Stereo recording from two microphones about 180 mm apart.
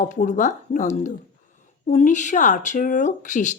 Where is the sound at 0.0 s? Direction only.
45° left (ahead or behind).